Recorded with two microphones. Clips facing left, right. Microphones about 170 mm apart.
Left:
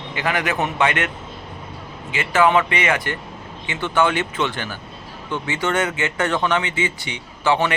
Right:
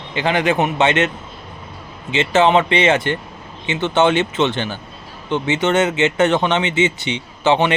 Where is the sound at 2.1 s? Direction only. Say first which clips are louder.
Right 3 dB; 25° right (ahead or behind).